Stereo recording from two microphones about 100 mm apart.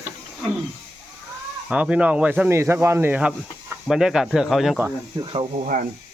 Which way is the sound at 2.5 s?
25° right (ahead or behind).